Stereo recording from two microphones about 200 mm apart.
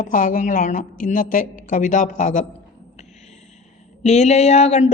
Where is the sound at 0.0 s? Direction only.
40° left (ahead or behind).